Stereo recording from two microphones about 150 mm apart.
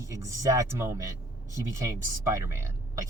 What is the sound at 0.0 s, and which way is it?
Speech, 20° right (ahead or behind).